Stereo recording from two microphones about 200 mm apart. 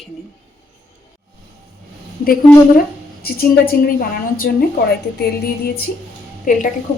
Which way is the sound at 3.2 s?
50° left (ahead or behind).